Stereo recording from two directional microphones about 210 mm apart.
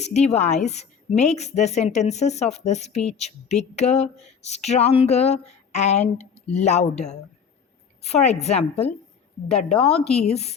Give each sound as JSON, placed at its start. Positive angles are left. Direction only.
{"t": 0.0, "sound": "a woman's voice", "side_deg": 30}